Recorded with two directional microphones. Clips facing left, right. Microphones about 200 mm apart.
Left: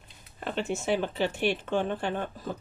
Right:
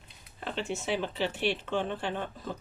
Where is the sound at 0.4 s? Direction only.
50° left (ahead or behind).